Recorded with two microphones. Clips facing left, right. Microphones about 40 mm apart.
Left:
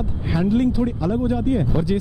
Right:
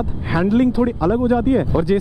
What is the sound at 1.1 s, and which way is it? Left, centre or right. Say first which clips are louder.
Speech: right 5 dB; centre.